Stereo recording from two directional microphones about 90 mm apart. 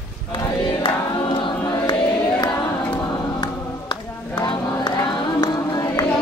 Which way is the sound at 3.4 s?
55° left (ahead or behind).